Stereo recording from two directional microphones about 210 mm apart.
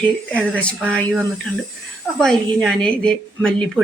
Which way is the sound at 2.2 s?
5° left (ahead or behind).